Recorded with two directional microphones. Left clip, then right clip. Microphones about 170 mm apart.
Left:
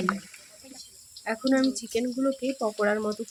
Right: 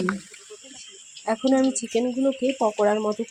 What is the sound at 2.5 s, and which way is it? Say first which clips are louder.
Speech: right 5 dB; centre (ahead or behind).